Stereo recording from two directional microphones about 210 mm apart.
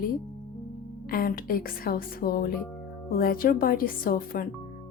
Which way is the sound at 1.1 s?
45° left (ahead or behind).